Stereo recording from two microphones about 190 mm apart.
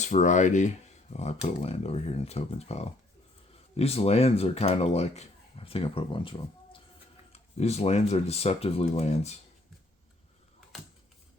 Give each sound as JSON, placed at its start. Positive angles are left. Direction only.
{"t": 0.0, "sound": "speech", "side_deg": 40}
{"t": 7.3, "sound": "speech", "side_deg": 35}